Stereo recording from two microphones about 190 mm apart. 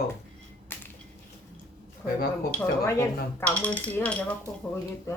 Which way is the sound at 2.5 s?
10° left (ahead or behind).